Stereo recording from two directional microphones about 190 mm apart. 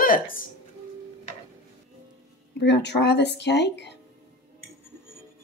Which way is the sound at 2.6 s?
65° left (ahead or behind).